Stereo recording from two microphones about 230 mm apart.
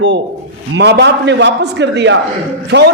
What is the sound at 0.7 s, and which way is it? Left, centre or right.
A man's voice, right.